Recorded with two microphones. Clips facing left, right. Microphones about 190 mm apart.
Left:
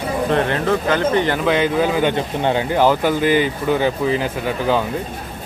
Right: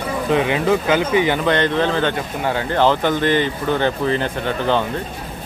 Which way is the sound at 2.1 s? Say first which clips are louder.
Left 3 dB; 25° left (ahead or behind).